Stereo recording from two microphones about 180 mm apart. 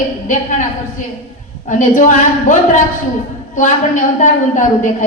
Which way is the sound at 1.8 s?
45° left (ahead or behind).